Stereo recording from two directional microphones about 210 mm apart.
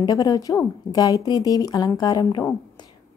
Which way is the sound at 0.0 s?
15° left (ahead or behind).